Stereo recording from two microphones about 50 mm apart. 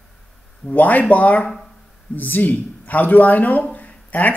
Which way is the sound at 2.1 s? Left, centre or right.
Left.